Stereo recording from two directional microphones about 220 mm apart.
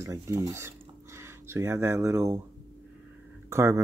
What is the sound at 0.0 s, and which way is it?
Speech, 15° right (ahead or behind).